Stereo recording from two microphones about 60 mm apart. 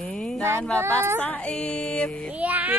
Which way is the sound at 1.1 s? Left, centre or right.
Left.